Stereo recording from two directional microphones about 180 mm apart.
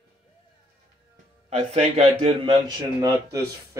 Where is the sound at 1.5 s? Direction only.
35° right (ahead or behind).